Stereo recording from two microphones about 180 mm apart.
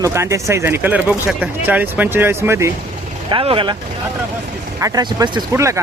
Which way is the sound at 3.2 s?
30° right (ahead or behind).